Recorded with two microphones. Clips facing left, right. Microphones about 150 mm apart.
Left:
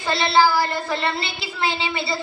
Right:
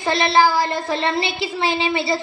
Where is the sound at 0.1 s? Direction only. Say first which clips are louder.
Right 1 dB; 20° right (ahead or behind).